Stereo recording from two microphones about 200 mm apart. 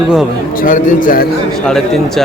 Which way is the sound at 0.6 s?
40° left (ahead or behind).